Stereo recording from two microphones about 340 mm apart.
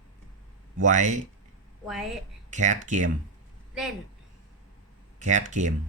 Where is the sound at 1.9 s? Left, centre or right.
Centre.